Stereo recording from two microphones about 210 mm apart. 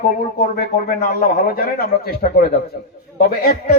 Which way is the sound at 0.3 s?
45° left (ahead or behind).